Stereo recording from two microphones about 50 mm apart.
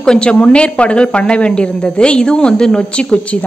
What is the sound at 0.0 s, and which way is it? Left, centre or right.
A woman's voice, centre.